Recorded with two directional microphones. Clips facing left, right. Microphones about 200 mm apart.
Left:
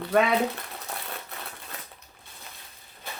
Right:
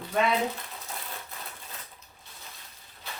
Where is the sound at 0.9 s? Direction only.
65° left (ahead or behind).